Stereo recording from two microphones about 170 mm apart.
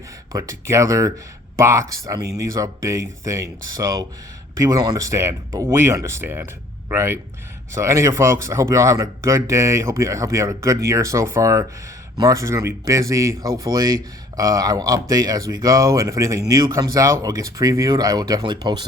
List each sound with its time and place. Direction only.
0.3 s speech: 20° right (ahead or behind)